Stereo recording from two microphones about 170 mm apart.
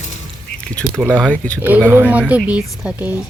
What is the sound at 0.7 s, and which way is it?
Speech, 5° left (ahead or behind).